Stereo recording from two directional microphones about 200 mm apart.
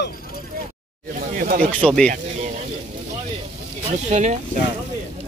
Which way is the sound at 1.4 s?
45° right (ahead or behind).